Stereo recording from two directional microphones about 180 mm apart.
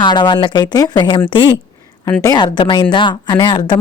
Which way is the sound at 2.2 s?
25° left (ahead or behind).